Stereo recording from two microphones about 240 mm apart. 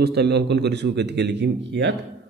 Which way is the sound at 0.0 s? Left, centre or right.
Right.